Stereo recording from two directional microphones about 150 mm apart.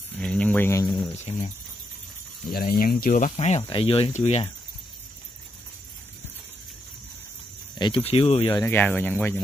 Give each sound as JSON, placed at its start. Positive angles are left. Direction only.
{"t": 0.2, "sound": "a sound", "side_deg": 5}
{"t": 2.5, "sound": "speech", "side_deg": 70}
{"t": 3.1, "sound": "speech", "side_deg": 50}
{"t": 3.6, "sound": "speech", "side_deg": 40}
{"t": 7.8, "sound": "speech", "side_deg": 35}
{"t": 8.6, "sound": "speech", "side_deg": 10}